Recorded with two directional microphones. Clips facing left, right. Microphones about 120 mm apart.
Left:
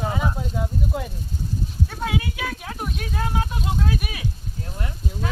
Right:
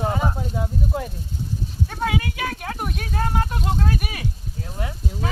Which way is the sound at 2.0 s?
55° right (ahead or behind).